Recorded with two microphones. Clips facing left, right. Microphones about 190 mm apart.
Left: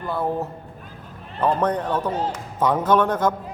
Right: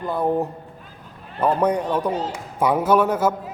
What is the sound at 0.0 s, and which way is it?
Speech, 20° right (ahead or behind).